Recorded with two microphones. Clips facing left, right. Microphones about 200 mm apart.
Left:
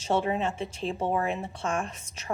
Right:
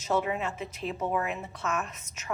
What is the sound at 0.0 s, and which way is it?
A woman's voice, 30° left (ahead or behind).